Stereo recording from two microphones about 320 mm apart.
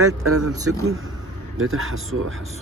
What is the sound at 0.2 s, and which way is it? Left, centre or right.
Speech, right.